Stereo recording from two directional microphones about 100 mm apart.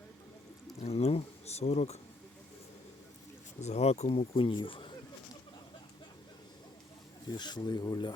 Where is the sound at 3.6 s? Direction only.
90° left; by 4.9 s 60° left (ahead or behind).